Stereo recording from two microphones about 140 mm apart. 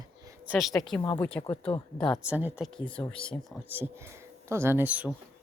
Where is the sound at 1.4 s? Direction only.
40° left (ahead or behind).